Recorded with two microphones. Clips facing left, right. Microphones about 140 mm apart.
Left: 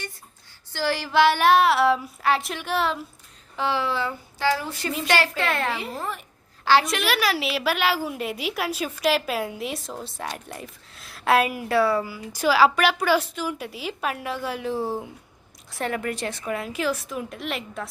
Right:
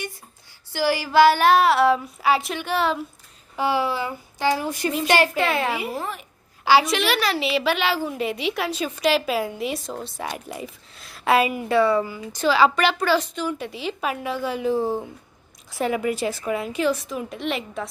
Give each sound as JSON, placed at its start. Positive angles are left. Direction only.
{"t": 0.7, "sound": "a woman's voice", "side_deg": -10}
{"t": 3.5, "sound": "speech", "side_deg": -10}
{"t": 5.4, "sound": "a woman's voice", "side_deg": -5}